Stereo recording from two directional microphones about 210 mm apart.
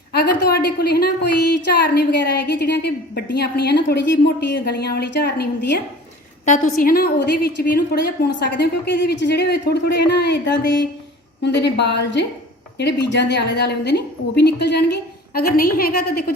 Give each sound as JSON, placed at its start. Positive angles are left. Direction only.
{"t": 0.1, "sound": "a woman's voice", "side_deg": 50}
{"t": 2.1, "sound": "a woman's voice", "side_deg": 50}
{"t": 6.4, "sound": "a woman's voice", "side_deg": 40}